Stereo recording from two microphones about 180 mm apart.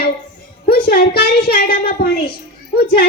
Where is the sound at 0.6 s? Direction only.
60° left (ahead or behind).